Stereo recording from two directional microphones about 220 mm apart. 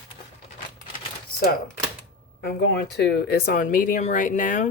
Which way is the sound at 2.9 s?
45° left (ahead or behind).